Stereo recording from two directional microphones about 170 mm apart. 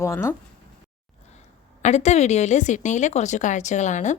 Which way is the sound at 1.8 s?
40° left (ahead or behind).